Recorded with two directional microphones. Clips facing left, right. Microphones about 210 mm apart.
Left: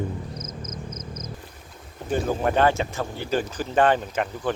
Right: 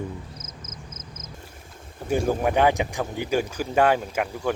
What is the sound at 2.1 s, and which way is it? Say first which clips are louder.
Speech: right 1 dB; 10° right (ahead or behind).